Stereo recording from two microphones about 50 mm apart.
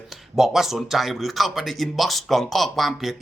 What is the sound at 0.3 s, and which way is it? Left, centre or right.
Speech, centre.